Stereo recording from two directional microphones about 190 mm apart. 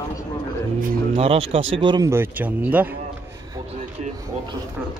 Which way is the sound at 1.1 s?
30° right (ahead or behind).